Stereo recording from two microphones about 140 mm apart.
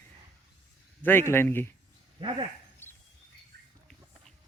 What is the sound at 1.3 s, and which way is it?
Speech, 15° left (ahead or behind).